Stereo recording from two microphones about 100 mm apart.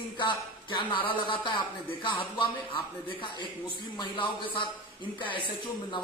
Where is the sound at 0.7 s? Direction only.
55° left (ahead or behind).